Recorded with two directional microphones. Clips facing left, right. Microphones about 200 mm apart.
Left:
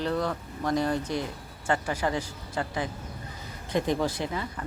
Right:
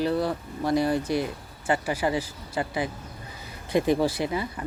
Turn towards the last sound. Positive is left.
turn(degrees=-10)  # may be behind; listen again after turning